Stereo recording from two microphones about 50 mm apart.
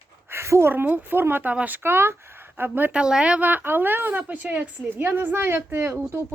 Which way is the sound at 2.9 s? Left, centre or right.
Centre.